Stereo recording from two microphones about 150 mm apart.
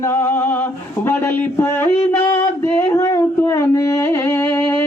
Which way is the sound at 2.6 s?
15° left (ahead or behind).